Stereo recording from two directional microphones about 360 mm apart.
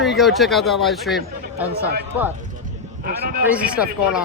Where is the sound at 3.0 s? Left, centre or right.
Right.